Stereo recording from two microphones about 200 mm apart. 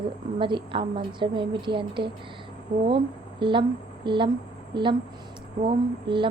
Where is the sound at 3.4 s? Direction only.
25° right (ahead or behind).